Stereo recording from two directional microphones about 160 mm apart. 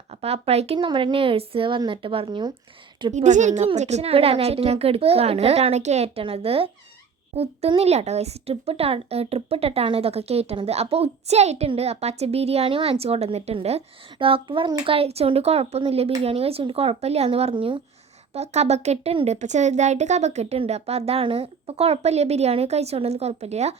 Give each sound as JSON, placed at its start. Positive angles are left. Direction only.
{"t": 0.1, "sound": "speech", "side_deg": -40}
{"t": 3.1, "sound": "a woman's voice", "side_deg": -50}
{"t": 18.3, "sound": "speech", "side_deg": -40}